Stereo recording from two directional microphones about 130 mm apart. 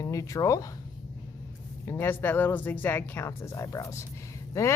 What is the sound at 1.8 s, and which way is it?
Speech, 15° left (ahead or behind).